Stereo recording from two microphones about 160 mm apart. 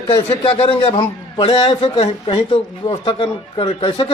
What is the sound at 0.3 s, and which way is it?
Speech, 35° left (ahead or behind).